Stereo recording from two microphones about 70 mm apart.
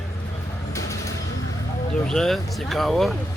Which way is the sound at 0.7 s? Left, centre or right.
Left.